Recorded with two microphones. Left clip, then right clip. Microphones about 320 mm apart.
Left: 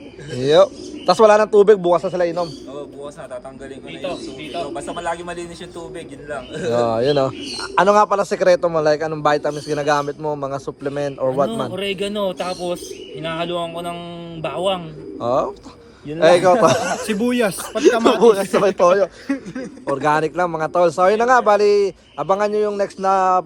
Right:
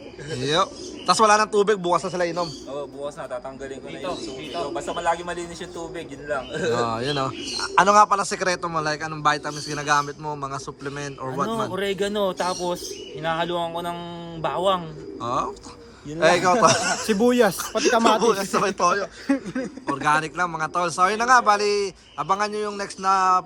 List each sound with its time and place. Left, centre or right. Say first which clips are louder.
0.4 s a man's voice: left 9 dB; centre
2.7 s music: right 1 dB; right
4.6 s speech: right 1 dB; centre
6.7 s a man's voice: left 8 dB; centre
17.6 s a man's voice: left 4 dB; centre